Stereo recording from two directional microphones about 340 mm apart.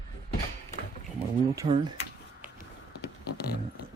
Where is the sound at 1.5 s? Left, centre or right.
Centre.